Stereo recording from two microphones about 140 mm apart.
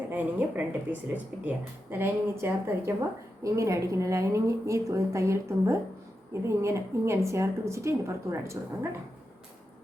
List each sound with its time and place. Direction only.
0.1 s a woman's voice: 15° right (ahead or behind)